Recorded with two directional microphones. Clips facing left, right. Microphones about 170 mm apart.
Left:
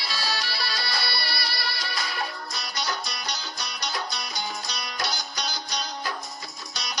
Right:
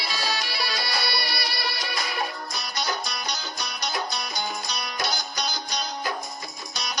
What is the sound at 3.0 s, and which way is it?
Music, 50° right (ahead or behind).